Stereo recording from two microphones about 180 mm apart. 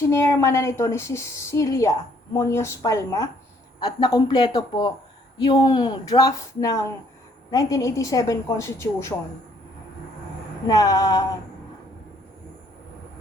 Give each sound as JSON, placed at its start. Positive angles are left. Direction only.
{"t": 0.1, "sound": "a woman's voice", "side_deg": 15}
{"t": 10.7, "sound": "speech", "side_deg": 20}